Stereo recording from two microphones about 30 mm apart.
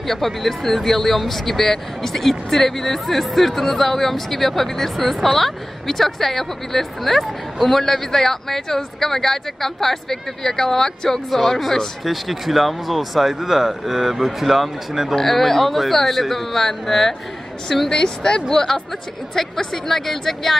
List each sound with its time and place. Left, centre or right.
0.4 s speech: centre
12.0 s speech: centre
15.1 s speech: centre; by 18.4 s left
18.5 s speech: centre